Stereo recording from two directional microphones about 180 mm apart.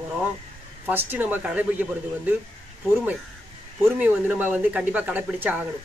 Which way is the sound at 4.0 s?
10° right (ahead or behind).